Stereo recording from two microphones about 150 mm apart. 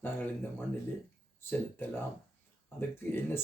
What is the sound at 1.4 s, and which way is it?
Speech, 15° left (ahead or behind).